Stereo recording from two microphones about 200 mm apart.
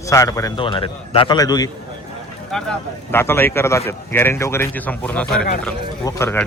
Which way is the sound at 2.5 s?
10° left (ahead or behind).